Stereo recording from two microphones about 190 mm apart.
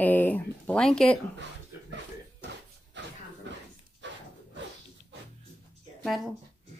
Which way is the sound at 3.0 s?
70° right (ahead or behind).